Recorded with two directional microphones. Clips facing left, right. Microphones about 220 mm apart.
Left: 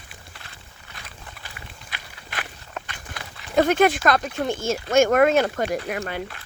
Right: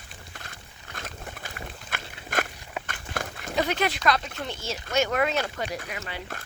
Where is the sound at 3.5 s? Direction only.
50° left (ahead or behind).